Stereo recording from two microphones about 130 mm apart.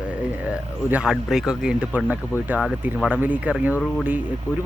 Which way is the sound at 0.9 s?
5° right (ahead or behind).